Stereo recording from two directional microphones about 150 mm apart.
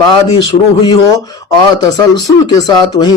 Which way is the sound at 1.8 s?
25° left (ahead or behind).